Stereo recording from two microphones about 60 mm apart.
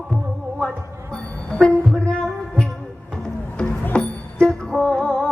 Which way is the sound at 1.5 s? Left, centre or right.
Centre.